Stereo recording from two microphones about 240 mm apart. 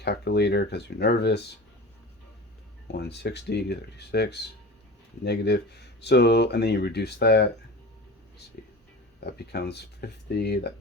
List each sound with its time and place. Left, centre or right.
0.0 s speech: left
2.8 s speech: left
9.2 s speech: left